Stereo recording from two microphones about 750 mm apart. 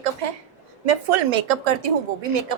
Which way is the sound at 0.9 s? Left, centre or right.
Right.